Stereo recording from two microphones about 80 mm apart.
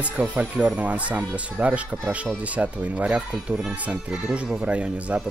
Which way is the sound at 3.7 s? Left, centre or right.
Centre.